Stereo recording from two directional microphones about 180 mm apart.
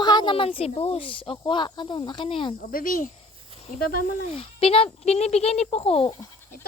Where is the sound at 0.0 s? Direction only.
25° left (ahead or behind).